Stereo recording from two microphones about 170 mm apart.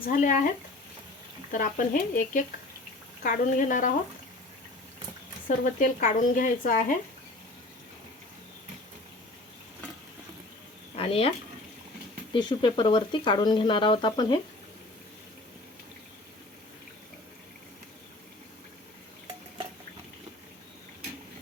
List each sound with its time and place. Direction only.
0.0 s speech: 50° left (ahead or behind)
1.5 s speech: 55° left (ahead or behind)
5.5 s speech: 50° left (ahead or behind)
10.9 s speech: 35° left (ahead or behind)
12.3 s speech: 25° left (ahead or behind)